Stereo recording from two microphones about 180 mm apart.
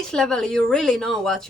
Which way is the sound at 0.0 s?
5° left (ahead or behind).